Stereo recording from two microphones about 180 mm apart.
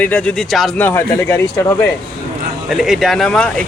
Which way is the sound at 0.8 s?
15° left (ahead or behind).